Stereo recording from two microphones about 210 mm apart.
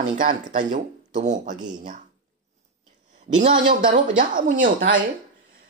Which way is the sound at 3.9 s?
40° right (ahead or behind).